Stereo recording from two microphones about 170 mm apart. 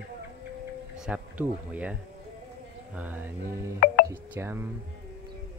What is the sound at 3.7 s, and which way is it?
Music, 60° left (ahead or behind).